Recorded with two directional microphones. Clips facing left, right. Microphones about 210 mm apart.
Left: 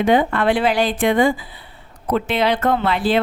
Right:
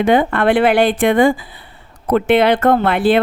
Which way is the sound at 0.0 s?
60° right (ahead or behind).